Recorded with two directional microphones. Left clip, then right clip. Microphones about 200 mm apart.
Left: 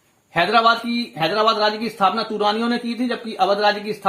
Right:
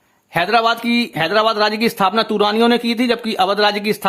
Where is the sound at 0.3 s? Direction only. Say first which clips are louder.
Right 1 dB; 30° right (ahead or behind).